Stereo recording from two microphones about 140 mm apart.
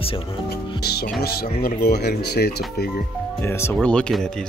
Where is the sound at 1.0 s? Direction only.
90° left.